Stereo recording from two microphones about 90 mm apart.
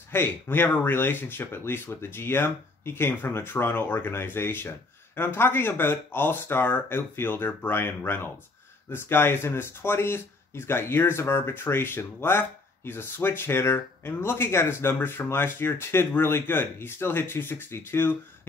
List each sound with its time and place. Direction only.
0.1 s speech: 25° left (ahead or behind)